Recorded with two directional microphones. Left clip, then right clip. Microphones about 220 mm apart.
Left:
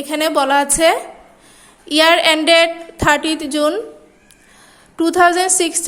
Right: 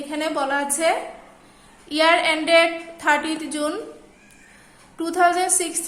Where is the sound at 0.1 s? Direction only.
40° left (ahead or behind).